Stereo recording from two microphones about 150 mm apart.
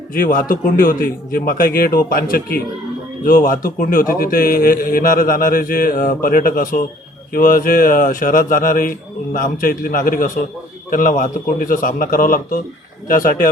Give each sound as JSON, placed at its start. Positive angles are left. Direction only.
{"t": 0.1, "sound": "a man's voice", "side_deg": 70}
{"t": 3.2, "sound": "a man's voice", "side_deg": 65}